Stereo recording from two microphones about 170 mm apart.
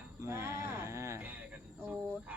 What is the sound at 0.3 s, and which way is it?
Music, 15° right (ahead or behind).